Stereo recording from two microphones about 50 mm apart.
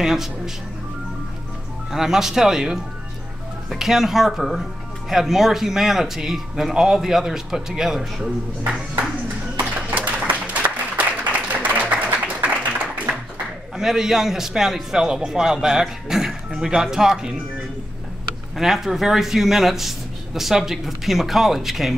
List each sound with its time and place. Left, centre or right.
0.0 s a man's voice: centre
1.9 s a man's voice: centre
9.8 s applause: right
12.4 s a sound: right
13.7 s a man's voice: centre
18.6 s speech: centre